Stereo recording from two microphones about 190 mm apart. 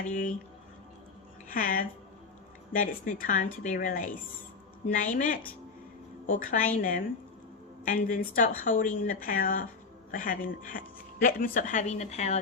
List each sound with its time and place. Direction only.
0.0 s a woman's voice: 45° left (ahead or behind)
1.5 s a woman's voice: 45° left (ahead or behind)
7.9 s a woman's voice: 50° left (ahead or behind)